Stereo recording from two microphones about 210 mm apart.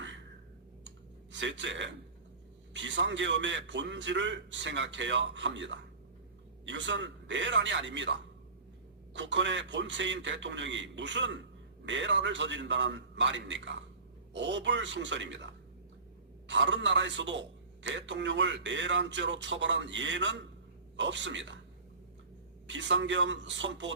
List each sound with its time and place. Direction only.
0.9 s clicking: 60° right (ahead or behind)
2.7 s a man's voice: 60° right (ahead or behind)
16.5 s a man's voice: 60° right (ahead or behind)
22.6 s a man's voice: 60° right (ahead or behind)